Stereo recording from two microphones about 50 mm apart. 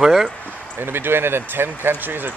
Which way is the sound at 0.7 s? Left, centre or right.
Right.